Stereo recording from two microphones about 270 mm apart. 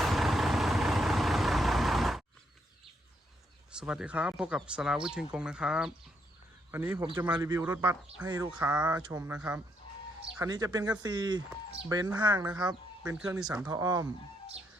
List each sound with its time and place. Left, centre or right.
0.0 s vehicle: centre
3.7 s speech: centre
8.5 s speech: centre
9.3 s speech: centre
13.0 s speech: centre